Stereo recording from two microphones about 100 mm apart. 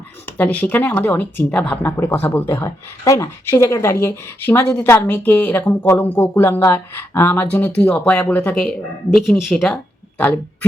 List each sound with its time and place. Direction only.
0.3 s speech: 15° left (ahead or behind)
2.6 s speech: 30° left (ahead or behind); by 8.7 s 15° left (ahead or behind)
9.1 s speech: centre (ahead or behind)
10.2 s speech: 15° left (ahead or behind)